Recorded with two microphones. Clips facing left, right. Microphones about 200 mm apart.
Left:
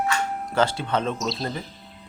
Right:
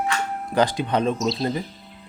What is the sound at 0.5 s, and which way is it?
Speech, 15° right (ahead or behind).